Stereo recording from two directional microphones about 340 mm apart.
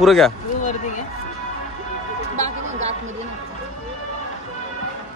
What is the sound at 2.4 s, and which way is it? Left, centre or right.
Music, centre.